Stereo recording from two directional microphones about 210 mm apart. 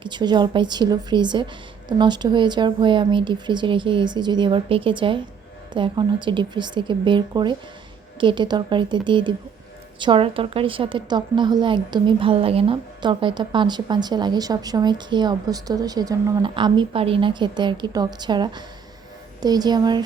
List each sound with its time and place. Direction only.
0.0 s a woman's voice: 20° right (ahead or behind)